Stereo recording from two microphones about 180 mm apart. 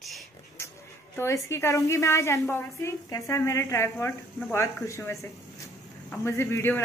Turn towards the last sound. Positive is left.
turn(degrees=15)  # may be behind; listen again after turning